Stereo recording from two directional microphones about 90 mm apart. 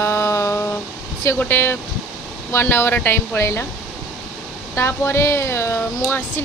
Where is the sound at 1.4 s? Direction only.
25° left (ahead or behind).